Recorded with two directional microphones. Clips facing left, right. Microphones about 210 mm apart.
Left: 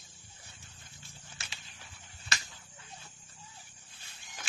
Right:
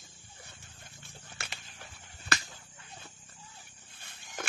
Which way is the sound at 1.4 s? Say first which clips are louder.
Right 6 dB; 60° right (ahead or behind).